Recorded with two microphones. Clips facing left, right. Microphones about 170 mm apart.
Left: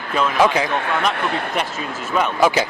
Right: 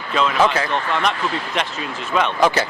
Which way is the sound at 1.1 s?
60° left (ahead or behind).